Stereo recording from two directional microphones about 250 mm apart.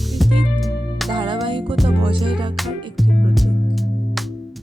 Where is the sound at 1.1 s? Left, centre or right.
Centre.